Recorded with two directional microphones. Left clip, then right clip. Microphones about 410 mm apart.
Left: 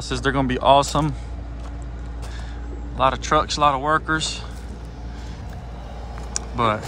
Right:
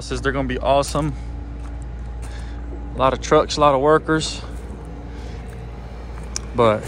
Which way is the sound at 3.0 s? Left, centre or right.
Centre.